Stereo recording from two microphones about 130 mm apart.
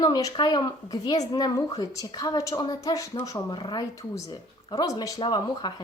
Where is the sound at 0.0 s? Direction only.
30° left (ahead or behind).